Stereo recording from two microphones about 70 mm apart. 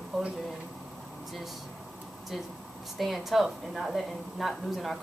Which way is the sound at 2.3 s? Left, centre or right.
Centre.